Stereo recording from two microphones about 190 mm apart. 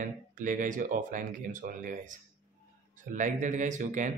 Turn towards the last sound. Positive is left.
turn(degrees=-40)  # may be behind; listen again after turning